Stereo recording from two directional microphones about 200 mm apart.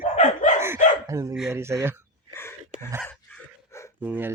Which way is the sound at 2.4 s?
10° left (ahead or behind).